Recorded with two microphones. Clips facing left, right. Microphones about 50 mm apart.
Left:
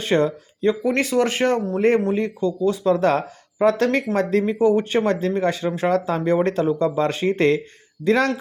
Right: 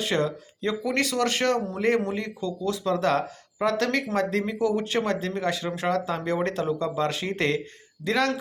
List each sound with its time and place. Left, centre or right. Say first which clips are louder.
0.0 s speech: left 6 dB; left